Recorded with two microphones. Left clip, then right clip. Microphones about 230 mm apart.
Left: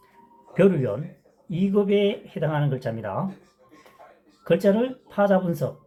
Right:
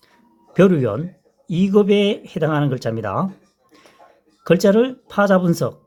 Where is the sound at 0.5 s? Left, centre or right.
Right.